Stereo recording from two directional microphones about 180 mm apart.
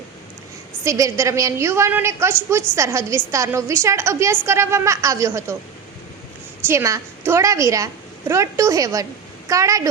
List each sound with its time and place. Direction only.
0.9 s a woman's voice: 15° right (ahead or behind)
6.7 s a woman's voice: 15° right (ahead or behind)